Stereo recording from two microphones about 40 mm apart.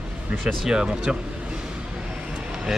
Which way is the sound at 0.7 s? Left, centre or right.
Centre.